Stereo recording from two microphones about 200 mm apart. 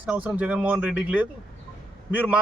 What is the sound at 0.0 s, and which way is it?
A man's voice, 5° right (ahead or behind).